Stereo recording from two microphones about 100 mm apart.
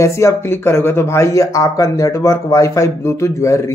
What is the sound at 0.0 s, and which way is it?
Speech, 30° left (ahead or behind).